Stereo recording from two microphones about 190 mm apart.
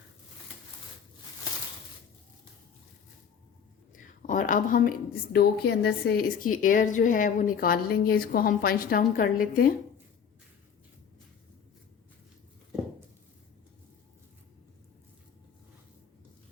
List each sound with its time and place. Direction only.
4.3 s a woman's voice: 45° left (ahead or behind)